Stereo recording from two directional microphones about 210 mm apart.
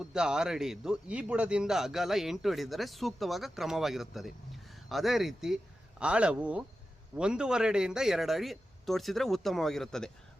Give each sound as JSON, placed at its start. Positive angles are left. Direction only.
{"t": 0.0, "sound": "a man's voice", "side_deg": -5}